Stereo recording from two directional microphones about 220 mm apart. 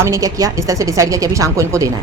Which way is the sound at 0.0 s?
15° right (ahead or behind).